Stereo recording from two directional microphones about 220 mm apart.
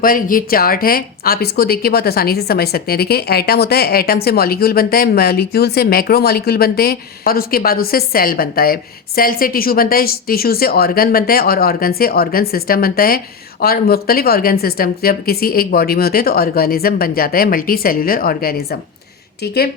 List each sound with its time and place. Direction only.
0.0 s speech: 40° left (ahead or behind)